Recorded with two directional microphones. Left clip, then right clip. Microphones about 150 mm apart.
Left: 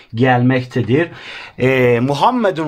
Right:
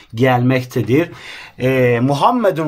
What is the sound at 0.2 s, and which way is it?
Speech, 30° left (ahead or behind).